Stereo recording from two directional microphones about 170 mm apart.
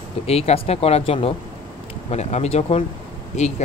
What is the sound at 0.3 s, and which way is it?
Speech, 40° left (ahead or behind).